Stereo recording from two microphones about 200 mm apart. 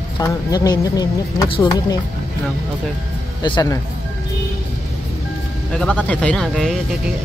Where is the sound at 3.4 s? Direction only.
20° left (ahead or behind).